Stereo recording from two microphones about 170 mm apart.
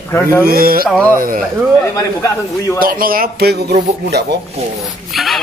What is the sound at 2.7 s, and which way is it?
Speech, 55° right (ahead or behind).